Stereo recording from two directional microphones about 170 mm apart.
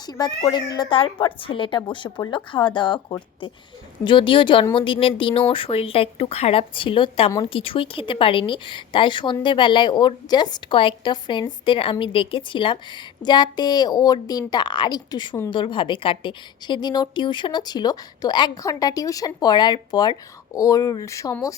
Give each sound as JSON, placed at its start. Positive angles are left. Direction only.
{"t": 0.0, "sound": "speech", "side_deg": 25}